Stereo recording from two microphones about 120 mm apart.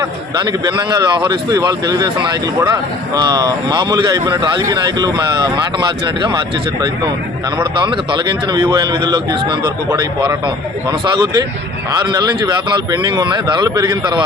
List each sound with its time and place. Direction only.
0.0 s speech: 35° right (ahead or behind)
7.6 s speech: 40° right (ahead or behind)